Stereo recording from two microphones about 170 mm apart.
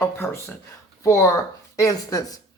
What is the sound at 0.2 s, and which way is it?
Speech, 10° left (ahead or behind).